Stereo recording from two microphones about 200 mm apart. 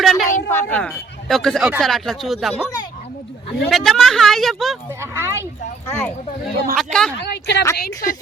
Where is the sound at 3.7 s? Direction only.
Centre (ahead or behind).